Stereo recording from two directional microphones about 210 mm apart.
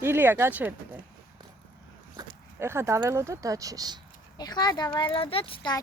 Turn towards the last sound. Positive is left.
turn(degrees=25)  # may be behind; listen again after turning